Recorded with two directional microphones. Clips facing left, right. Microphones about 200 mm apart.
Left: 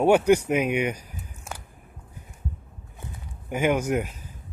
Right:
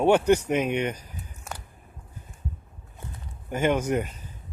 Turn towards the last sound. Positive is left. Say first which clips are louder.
# left 1 dB
turn(degrees=10)  # may be behind; listen again after turning